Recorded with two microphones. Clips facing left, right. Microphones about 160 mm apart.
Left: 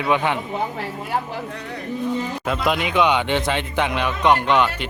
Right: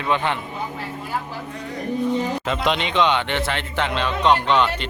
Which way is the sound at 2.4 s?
5° left (ahead or behind).